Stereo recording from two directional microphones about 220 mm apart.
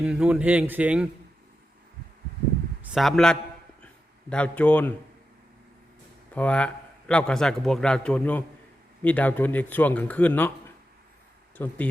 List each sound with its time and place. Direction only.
0.0 s speech: 5° right (ahead or behind)
2.8 s a man's voice: centre (ahead or behind)
6.3 s a man's voice: 5° left (ahead or behind)
11.5 s speech: 10° left (ahead or behind)